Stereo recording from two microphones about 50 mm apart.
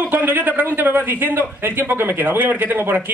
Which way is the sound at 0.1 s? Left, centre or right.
Right.